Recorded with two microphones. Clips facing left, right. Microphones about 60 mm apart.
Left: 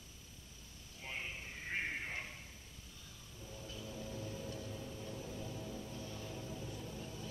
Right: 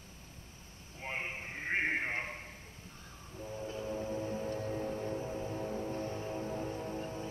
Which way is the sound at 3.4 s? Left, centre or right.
Right.